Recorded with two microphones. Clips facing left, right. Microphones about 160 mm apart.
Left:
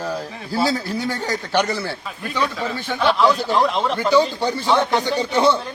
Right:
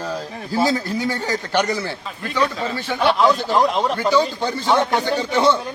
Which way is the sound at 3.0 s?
10° right (ahead or behind).